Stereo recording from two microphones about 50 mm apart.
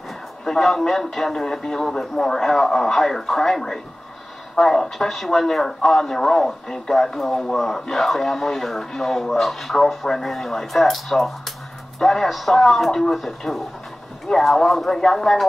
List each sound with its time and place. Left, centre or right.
0.5 s speech: centre